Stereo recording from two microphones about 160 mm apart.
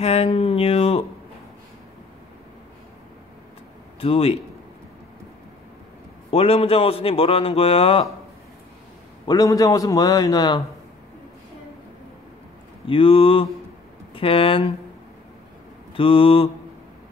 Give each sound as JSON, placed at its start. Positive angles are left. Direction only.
{"t": 0.0, "sound": "speech", "side_deg": 40}
{"t": 4.0, "sound": "speech", "side_deg": 35}
{"t": 6.3, "sound": "speech", "side_deg": 35}
{"t": 9.3, "sound": "a man's voice", "side_deg": 25}
{"t": 12.8, "sound": "speech", "side_deg": 35}
{"t": 16.0, "sound": "speech", "side_deg": 35}